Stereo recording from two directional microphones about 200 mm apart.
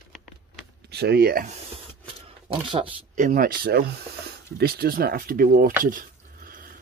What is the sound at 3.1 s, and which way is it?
Speech, 45° right (ahead or behind).